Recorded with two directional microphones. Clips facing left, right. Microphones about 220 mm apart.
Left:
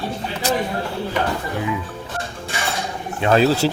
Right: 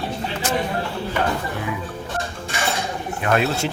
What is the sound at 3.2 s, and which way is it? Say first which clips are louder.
Speech: left 5 dB; 30° left (ahead or behind).